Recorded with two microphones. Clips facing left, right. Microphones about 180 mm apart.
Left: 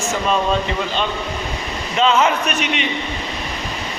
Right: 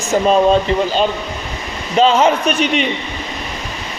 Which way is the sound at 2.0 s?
35° right (ahead or behind).